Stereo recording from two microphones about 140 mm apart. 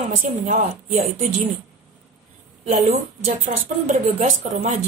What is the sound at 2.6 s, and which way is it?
A woman's voice, 50° right (ahead or behind).